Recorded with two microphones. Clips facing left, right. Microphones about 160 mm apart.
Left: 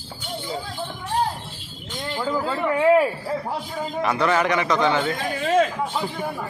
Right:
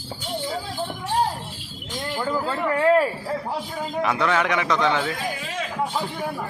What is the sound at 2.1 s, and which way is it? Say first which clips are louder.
Speech: left 1 dB; 5° right (ahead or behind).